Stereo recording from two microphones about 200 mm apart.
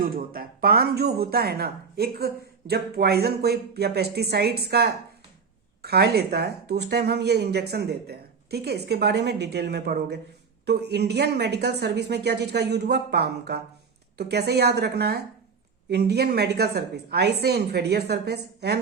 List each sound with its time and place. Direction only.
0.0 s speech: 45° right (ahead or behind)